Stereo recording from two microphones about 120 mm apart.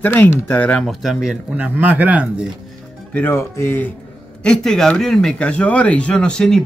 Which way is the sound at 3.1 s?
15° left (ahead or behind).